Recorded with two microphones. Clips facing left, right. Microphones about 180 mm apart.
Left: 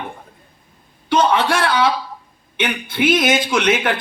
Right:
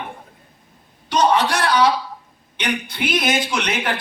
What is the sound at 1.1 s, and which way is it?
A man's voice, 50° left (ahead or behind).